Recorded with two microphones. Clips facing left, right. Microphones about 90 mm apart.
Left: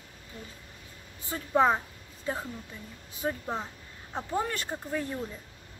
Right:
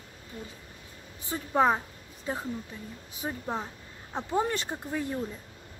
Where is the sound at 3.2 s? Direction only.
10° right (ahead or behind).